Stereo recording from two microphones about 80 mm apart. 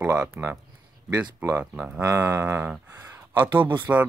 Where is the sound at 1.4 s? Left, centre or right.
Right.